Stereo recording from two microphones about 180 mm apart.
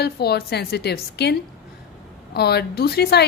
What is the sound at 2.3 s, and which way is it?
Speech, 65° left (ahead or behind).